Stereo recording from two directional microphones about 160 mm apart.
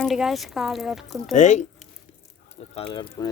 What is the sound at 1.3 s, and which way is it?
Speech, 50° left (ahead or behind).